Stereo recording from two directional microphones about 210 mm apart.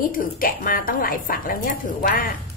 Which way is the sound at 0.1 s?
40° left (ahead or behind).